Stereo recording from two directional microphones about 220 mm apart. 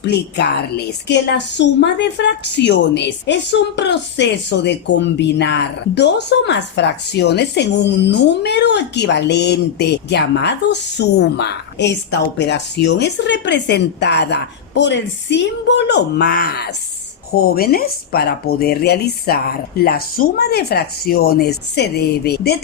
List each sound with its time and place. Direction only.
0.0 s a woman's voice: 50° left (ahead or behind)